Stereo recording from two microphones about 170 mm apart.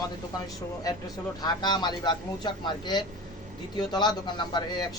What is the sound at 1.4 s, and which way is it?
A man's voice, 25° left (ahead or behind).